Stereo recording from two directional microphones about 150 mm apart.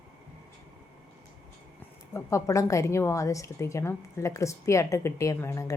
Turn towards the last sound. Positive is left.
turn(degrees=20)  # may be behind; listen again after turning